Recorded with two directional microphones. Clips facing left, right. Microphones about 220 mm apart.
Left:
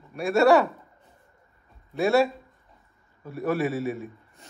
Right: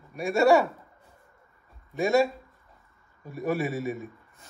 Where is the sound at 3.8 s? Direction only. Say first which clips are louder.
Left 2 dB; 40° right (ahead or behind).